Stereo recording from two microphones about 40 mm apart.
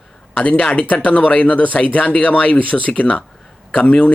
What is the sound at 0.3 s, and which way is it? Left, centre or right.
Speech, left.